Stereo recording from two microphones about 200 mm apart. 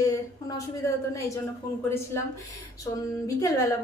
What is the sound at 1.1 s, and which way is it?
A woman's voice, 15° left (ahead or behind).